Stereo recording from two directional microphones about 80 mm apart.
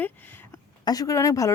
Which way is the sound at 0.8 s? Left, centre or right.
Left.